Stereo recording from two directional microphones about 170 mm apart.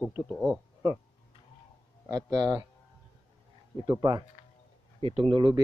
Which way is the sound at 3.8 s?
20° right (ahead or behind).